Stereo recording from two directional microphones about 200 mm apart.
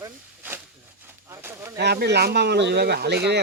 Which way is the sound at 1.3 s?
10° right (ahead or behind).